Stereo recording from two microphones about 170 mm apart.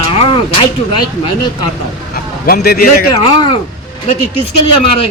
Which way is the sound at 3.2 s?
30° left (ahead or behind).